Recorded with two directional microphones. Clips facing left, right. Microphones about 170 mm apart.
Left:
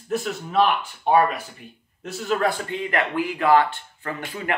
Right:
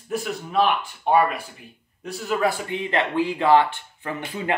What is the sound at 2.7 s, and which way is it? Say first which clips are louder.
Speech: right 1 dB; 25° right (ahead or behind).